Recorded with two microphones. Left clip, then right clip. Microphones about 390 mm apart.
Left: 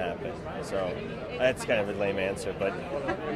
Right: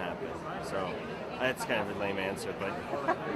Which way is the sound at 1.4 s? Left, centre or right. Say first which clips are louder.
Left 6 dB; left.